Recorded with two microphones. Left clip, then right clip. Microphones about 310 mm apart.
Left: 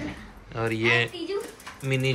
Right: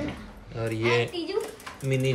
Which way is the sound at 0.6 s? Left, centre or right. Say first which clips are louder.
Left 2 dB; centre.